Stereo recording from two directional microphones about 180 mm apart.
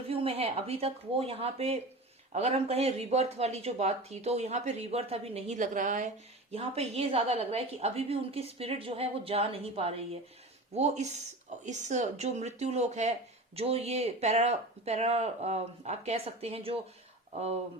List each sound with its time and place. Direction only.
0.1 s speech: 30° right (ahead or behind)